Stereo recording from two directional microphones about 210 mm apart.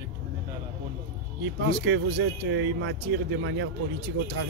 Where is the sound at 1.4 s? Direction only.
60° right (ahead or behind).